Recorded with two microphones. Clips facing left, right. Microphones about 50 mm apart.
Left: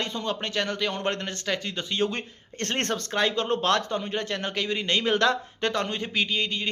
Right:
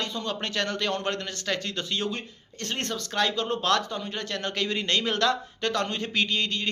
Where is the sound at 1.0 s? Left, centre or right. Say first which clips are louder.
Left 2 dB; left.